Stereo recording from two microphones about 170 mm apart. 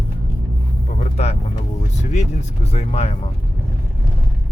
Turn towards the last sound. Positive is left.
turn(degrees=40)  # may be behind; listen again after turning